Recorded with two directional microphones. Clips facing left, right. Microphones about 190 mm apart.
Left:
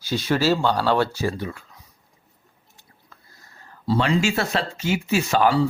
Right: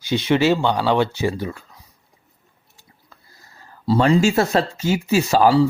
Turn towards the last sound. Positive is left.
turn(degrees=-30)  # may be behind; listen again after turning